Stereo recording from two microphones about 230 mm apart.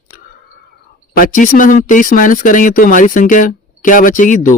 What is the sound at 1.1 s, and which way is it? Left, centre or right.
Speech, left.